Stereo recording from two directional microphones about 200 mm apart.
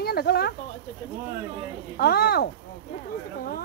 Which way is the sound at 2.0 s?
50° left (ahead or behind).